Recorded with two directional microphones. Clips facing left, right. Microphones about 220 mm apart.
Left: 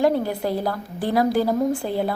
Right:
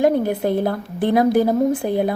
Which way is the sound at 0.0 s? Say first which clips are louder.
Right 3 dB; 20° right (ahead or behind).